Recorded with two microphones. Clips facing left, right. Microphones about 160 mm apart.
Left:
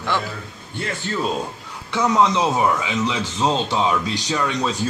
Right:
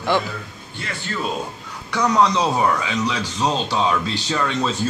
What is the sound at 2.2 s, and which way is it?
Speech, 20° left (ahead or behind).